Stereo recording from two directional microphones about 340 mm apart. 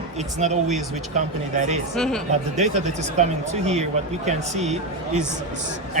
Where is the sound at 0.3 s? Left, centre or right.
Centre.